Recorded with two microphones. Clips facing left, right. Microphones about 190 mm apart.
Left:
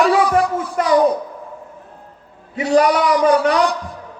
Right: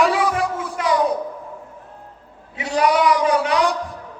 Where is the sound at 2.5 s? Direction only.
45° left (ahead or behind).